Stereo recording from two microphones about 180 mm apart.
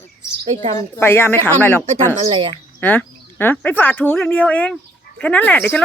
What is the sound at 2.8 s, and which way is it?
Speech, 10° left (ahead or behind).